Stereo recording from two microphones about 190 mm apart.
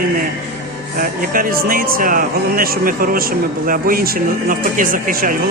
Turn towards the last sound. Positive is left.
turn(degrees=-45)  # may be behind; listen again after turning